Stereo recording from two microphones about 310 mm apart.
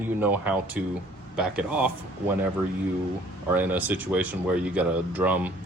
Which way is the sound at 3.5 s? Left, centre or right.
Centre.